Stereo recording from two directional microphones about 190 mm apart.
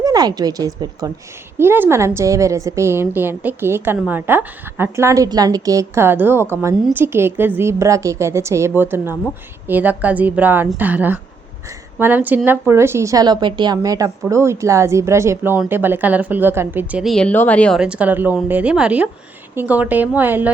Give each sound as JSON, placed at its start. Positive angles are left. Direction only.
{"t": 0.0, "sound": "a woman's voice", "side_deg": -20}
{"t": 17.7, "sound": "a woman's voice", "side_deg": -5}